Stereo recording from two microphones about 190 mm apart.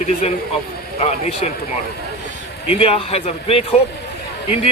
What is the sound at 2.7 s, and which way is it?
Speech, 30° left (ahead or behind).